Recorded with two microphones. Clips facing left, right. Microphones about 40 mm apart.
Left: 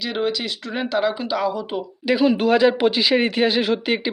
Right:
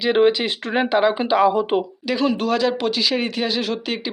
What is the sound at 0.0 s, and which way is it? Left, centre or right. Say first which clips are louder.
Speech: right 7 dB; right.